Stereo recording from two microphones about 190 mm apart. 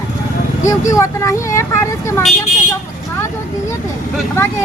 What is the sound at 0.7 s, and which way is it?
Speech, 15° left (ahead or behind).